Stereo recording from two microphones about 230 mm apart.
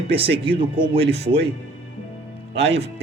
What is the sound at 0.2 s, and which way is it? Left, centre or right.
Speech, right.